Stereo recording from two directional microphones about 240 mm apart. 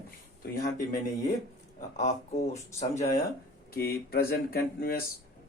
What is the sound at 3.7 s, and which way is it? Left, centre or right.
Speech, left.